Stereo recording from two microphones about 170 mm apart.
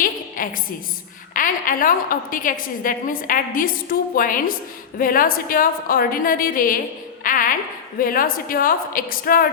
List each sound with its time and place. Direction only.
0.0 s a sound: 55° left (ahead or behind)
1.3 s a woman's voice: 50° left (ahead or behind)
7.3 s music: 55° left (ahead or behind)
7.9 s a woman's voice: 55° left (ahead or behind)